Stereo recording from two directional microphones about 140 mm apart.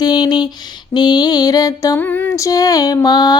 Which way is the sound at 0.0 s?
30° left (ahead or behind).